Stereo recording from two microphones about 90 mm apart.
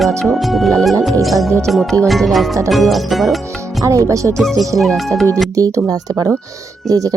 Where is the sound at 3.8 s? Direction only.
35° right (ahead or behind).